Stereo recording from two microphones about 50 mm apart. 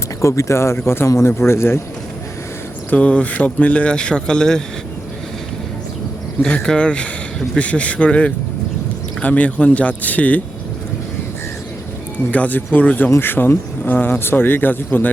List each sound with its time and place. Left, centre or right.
0.2 s speech: left
2.9 s speech: left
6.5 s speech: centre
12.3 s speech: left
13.1 s speech: left